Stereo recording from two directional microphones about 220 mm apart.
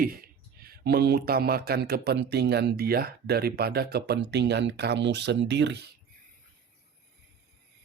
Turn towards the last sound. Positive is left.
turn(degrees=-50)  # may be behind; listen again after turning